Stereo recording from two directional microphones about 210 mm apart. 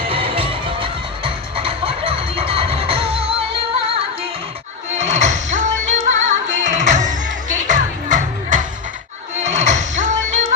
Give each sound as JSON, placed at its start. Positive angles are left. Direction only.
{"t": 0.1, "sound": "music", "side_deg": -25}
{"t": 4.9, "sound": "music", "side_deg": -35}